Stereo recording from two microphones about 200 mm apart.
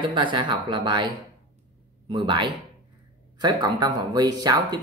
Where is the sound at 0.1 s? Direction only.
25° right (ahead or behind).